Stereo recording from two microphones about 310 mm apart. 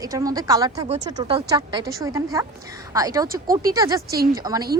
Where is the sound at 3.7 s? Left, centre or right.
Centre.